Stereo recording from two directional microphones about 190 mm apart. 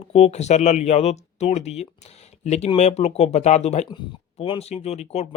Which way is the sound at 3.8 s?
25° left (ahead or behind).